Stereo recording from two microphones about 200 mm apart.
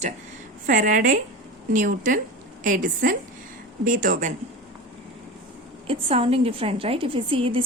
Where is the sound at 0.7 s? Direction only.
40° right (ahead or behind).